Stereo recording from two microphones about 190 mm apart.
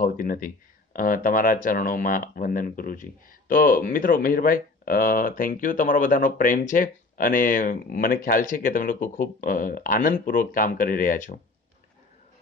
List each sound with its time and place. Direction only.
0.0 s speech: 45° left (ahead or behind)